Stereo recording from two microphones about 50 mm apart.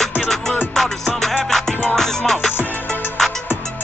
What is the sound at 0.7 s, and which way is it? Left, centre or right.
Music, centre.